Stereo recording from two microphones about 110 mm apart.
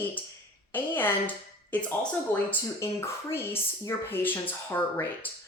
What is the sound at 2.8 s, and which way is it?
Speech, 25° left (ahead or behind).